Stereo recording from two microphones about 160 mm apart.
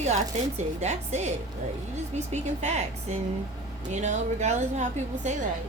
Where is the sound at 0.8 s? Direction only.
45° right (ahead or behind).